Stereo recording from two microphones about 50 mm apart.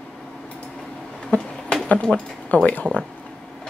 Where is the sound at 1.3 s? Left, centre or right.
Left.